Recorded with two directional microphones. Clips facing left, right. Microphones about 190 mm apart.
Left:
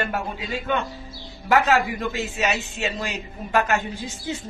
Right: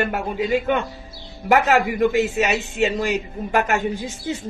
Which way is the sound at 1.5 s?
15° right (ahead or behind).